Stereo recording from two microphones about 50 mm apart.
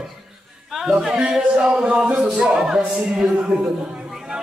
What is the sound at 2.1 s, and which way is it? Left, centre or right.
A man's voice, centre.